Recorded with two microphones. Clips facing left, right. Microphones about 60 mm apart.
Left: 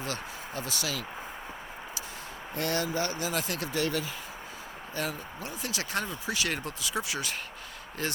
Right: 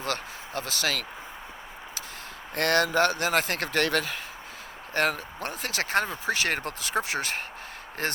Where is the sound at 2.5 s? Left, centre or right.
Right.